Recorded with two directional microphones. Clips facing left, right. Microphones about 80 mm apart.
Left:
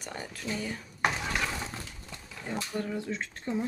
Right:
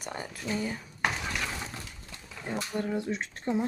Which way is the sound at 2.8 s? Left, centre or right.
Right.